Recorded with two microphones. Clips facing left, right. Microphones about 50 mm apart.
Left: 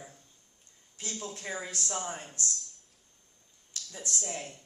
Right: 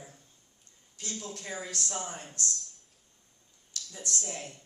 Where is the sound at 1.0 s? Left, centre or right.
Centre.